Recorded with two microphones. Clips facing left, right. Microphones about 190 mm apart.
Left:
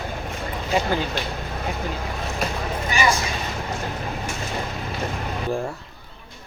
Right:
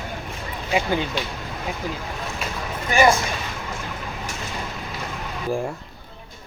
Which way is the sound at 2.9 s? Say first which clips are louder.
Right 5 dB; 50° right (ahead or behind).